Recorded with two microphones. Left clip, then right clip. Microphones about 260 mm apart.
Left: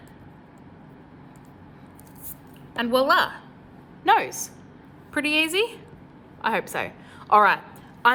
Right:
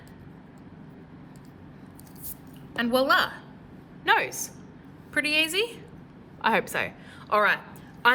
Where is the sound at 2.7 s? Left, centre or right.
Centre.